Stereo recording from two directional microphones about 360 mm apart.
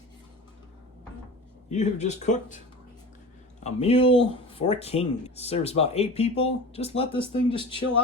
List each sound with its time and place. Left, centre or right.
1.7 s speech: centre
3.6 s speech: centre